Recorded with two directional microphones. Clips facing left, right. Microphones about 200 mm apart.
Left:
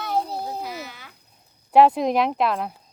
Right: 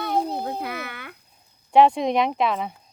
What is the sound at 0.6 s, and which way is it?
Speech, 60° right (ahead or behind).